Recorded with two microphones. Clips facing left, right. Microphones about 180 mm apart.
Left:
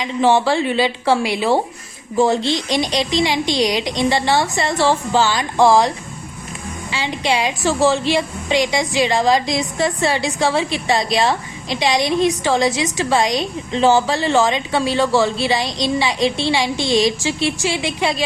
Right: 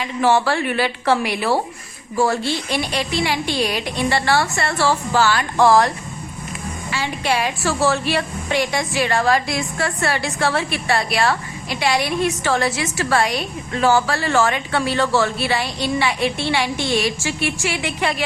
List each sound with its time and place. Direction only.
0.0 s a woman's voice: 15° left (ahead or behind)
7.3 s a woman's voice: 15° left (ahead or behind)
16.7 s a woman's voice: 10° right (ahead or behind)
17.0 s a woman's voice: 15° left (ahead or behind)